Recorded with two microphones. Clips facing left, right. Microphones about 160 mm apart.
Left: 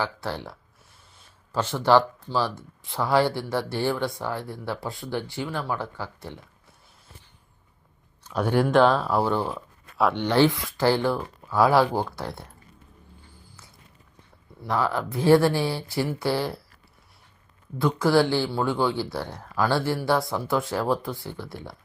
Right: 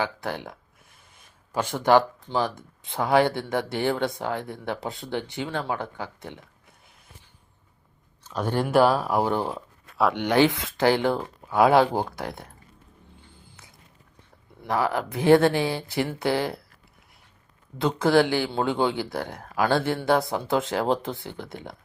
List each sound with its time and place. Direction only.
0.0 s speech: 15° right (ahead or behind)
8.2 s speech: 10° left (ahead or behind)
8.6 s speech: 10° right (ahead or behind)
9.8 s a sound: centre (ahead or behind)
10.2 s speech: 15° right (ahead or behind)
13.3 s a sound: 25° right (ahead or behind)
14.6 s speech: 15° right (ahead or behind)
17.7 s speech: 20° right (ahead or behind)